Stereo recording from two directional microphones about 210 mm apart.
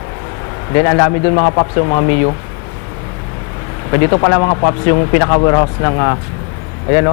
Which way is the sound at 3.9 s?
20° left (ahead or behind).